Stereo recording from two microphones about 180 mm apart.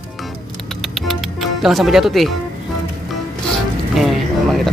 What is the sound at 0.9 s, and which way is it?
Music, centre (ahead or behind).